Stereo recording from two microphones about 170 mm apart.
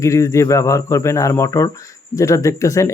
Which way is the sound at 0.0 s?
20° left (ahead or behind).